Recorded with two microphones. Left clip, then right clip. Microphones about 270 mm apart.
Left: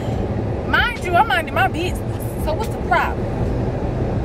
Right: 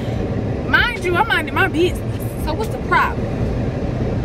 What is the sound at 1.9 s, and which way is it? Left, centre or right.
Music, left.